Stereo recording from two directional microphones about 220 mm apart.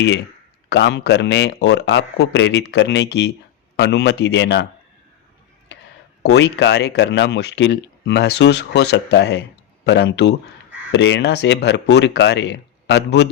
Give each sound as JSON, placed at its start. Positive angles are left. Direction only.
{"t": 0.7, "sound": "speech", "side_deg": 50}
{"t": 6.2, "sound": "speech", "side_deg": 50}